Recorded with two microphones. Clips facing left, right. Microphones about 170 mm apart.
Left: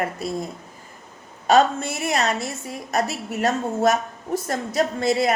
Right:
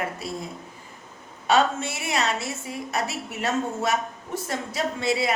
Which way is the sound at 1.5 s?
40° left (ahead or behind).